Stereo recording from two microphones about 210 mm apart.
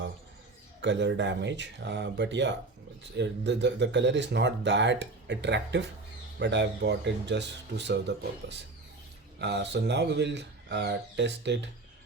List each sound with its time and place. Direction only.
0.8 s speech: 55° right (ahead or behind)